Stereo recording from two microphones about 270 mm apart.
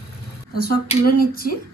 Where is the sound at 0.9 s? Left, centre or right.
Left.